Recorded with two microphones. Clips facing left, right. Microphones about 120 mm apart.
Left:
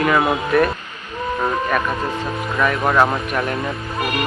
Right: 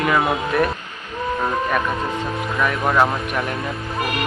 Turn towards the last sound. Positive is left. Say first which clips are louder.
# left 1 dB
turn(degrees=0)  # may be behind; listen again after turning